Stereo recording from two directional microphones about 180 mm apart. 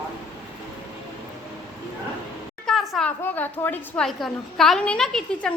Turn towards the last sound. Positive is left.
turn(degrees=5)  # may be behind; listen again after turning